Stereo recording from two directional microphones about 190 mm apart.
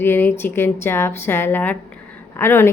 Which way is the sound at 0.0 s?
10° left (ahead or behind).